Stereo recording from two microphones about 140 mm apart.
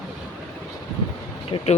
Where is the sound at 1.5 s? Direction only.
35° left (ahead or behind).